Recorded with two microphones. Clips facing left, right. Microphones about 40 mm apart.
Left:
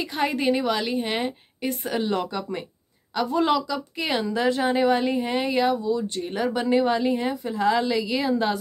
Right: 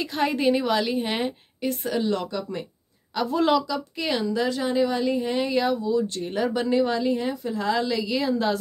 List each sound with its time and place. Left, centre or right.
0.0 s a woman's voice: centre
2.0 s speech: left
3.2 s a woman's voice: centre
4.3 s a woman's voice: left; by 6.7 s centre
6.7 s a woman's voice: left